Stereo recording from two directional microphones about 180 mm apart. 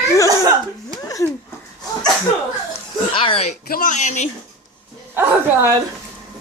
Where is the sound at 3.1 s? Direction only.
30° left (ahead or behind).